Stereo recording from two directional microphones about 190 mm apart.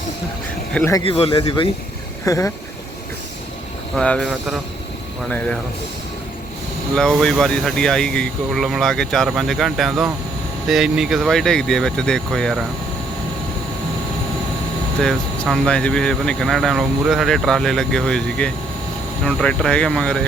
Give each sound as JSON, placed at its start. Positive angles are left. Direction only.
{"t": 0.7, "sound": "speech", "side_deg": 5}
{"t": 0.9, "sound": "speech", "side_deg": 30}
{"t": 2.2, "sound": "speech", "side_deg": 15}
{"t": 3.9, "sound": "speech", "side_deg": 5}
{"t": 6.9, "sound": "speech", "side_deg": 5}
{"t": 15.0, "sound": "speech", "side_deg": 5}